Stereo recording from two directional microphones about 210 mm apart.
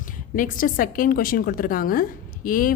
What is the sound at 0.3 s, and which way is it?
A woman's voice, 40° left (ahead or behind).